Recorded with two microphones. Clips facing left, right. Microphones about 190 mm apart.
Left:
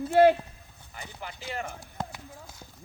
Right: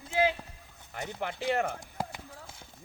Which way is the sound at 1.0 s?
65° right (ahead or behind).